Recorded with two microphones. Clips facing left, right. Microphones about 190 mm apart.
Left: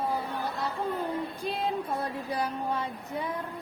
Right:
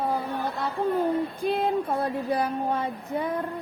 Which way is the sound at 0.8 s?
60° right (ahead or behind).